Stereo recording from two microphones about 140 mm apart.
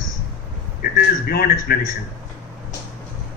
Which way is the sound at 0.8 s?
90° left.